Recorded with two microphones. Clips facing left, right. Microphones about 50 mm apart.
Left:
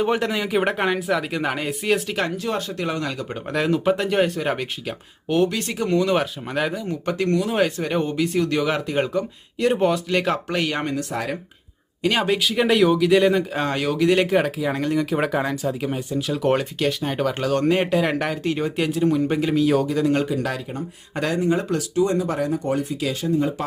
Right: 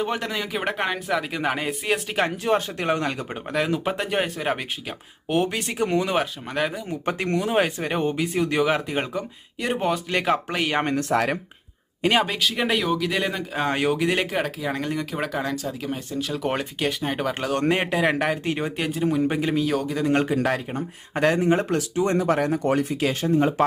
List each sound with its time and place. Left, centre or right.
0.0 s speech: centre; by 3.2 s right
3.5 s speech: centre
5.3 s speech: centre
6.1 s speech: centre
7.0 s speech: right; by 10.8 s centre
11.1 s speech: right
12.2 s speech: centre
13.7 s speech: right
14.3 s speech: centre
15.1 s speech: centre
18.8 s speech: centre
19.6 s speech: centre
20.2 s speech: right
22.2 s speech: right